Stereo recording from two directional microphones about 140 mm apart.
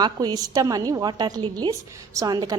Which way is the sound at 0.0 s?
30° right (ahead or behind).